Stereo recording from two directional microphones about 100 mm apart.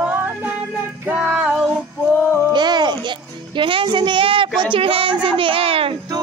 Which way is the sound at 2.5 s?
45° right (ahead or behind).